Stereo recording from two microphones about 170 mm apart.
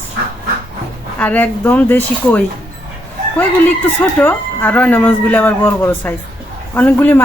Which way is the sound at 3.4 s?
10° left (ahead or behind).